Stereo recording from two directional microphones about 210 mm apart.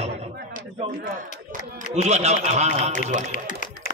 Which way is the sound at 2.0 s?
30° right (ahead or behind).